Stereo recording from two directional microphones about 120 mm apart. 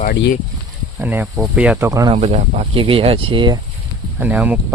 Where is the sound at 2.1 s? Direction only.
60° right (ahead or behind); by 3.6 s 40° right (ahead or behind).